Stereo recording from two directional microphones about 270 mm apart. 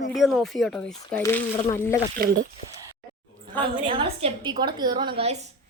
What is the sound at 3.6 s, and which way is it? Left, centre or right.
A woman's voice, centre.